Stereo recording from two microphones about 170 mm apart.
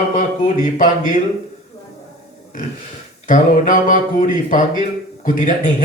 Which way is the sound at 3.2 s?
50° left (ahead or behind).